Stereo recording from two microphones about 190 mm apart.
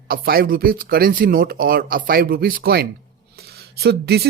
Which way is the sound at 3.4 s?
55° right (ahead or behind).